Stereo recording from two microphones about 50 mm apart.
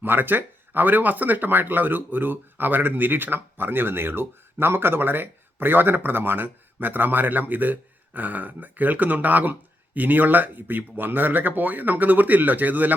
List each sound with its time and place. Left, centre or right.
0.0 s speech: right